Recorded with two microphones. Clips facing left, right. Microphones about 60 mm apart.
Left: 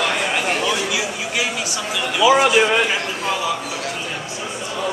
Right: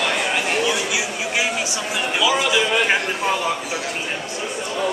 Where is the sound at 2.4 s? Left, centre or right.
Left.